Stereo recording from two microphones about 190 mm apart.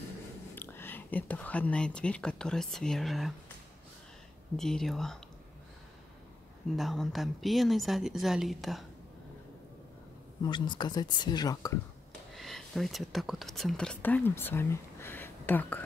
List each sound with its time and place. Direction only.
0.6 s speech: 10° left (ahead or behind)
4.6 s a woman's voice: centre (ahead or behind)
6.8 s a woman's voice: centre (ahead or behind)
10.4 s speech: 25° left (ahead or behind)
12.4 s speech: centre (ahead or behind)